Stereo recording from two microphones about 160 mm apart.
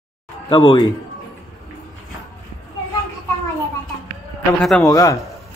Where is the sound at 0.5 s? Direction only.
30° left (ahead or behind).